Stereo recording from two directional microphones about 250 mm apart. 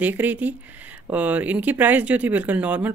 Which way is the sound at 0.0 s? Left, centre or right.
Centre.